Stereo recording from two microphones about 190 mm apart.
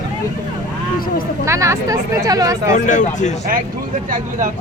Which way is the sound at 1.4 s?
15° right (ahead or behind).